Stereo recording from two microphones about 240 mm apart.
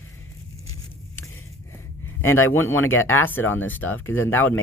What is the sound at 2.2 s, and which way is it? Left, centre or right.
Speech, centre.